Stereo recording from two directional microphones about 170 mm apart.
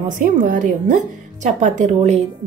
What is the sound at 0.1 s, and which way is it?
Speech, 50° right (ahead or behind).